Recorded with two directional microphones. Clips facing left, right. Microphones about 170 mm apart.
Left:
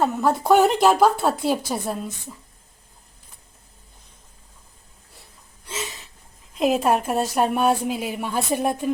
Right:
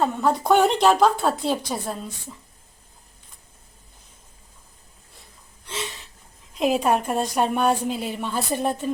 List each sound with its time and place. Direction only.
0.0 s a woman's voice: 5° left (ahead or behind)
5.6 s a sound: 5° left (ahead or behind)
6.5 s a woman's voice: centre (ahead or behind)